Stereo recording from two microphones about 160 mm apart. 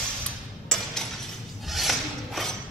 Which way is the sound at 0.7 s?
5° left (ahead or behind).